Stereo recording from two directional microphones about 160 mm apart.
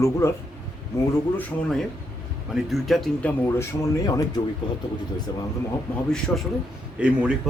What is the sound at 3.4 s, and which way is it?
Speech, 15° left (ahead or behind).